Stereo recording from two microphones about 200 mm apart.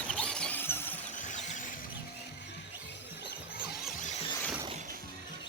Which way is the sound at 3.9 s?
40° left (ahead or behind).